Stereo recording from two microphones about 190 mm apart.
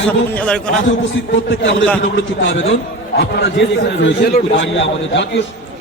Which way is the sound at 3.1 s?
60° left (ahead or behind).